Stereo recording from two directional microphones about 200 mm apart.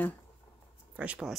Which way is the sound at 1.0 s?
5° right (ahead or behind).